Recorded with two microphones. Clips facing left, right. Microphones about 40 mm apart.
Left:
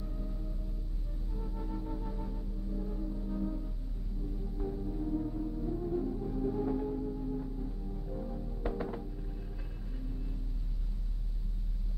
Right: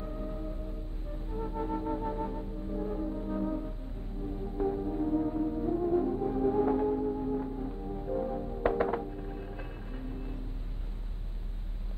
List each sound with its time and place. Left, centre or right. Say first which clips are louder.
0.0 s music: right 6 dB; right